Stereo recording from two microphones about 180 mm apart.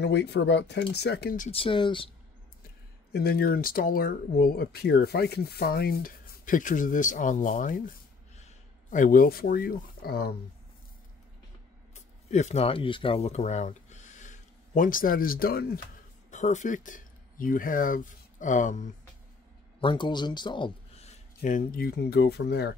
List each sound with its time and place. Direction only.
0.0 s speech: 70° left (ahead or behind); by 1.5 s 55° left (ahead or behind)
1.5 s speech: 30° left (ahead or behind)
3.1 s speech: 60° left (ahead or behind)
11.9 s speech: 40° left (ahead or behind)
16.3 s speech: 40° left (ahead or behind)
19.8 s speech: 25° left (ahead or behind)
21.4 s speech: 50° left (ahead or behind); by 22.7 s 65° left (ahead or behind)